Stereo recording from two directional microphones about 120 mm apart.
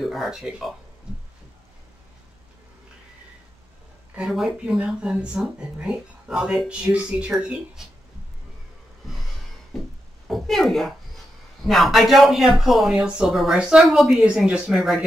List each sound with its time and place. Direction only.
0.0 s speech: centre (ahead or behind)
4.1 s speech: 5° right (ahead or behind)
10.2 s a woman's voice: centre (ahead or behind)